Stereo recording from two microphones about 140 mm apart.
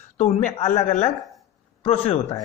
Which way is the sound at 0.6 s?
60° left (ahead or behind).